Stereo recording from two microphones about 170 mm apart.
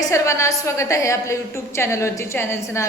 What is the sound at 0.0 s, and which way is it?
A woman's voice, 15° left (ahead or behind).